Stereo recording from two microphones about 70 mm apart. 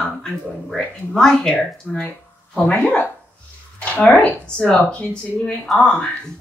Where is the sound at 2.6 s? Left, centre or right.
Centre.